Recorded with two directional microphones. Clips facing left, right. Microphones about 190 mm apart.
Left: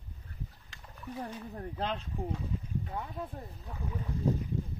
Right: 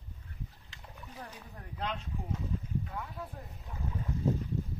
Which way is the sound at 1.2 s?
35° left (ahead or behind).